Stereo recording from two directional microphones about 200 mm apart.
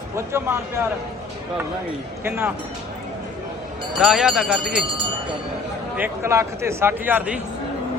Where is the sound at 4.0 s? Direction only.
Centre (ahead or behind).